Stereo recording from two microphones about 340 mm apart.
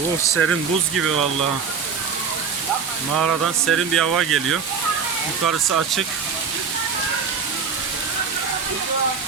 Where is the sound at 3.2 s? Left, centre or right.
Right.